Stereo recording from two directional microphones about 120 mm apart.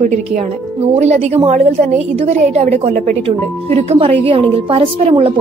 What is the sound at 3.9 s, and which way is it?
A woman's voice, 50° right (ahead or behind).